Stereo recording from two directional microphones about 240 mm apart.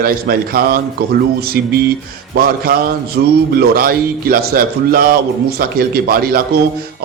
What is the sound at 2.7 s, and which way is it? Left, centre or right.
Speech, right.